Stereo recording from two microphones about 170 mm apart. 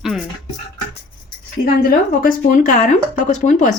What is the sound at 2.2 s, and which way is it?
Speech, 50° left (ahead or behind).